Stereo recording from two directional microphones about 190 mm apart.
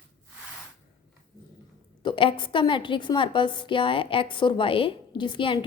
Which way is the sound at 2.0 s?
25° left (ahead or behind).